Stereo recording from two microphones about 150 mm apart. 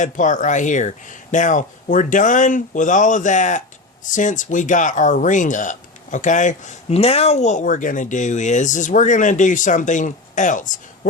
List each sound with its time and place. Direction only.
0.0 s speech: 55° left (ahead or behind)